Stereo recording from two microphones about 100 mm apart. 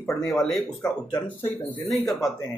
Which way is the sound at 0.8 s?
20° left (ahead or behind).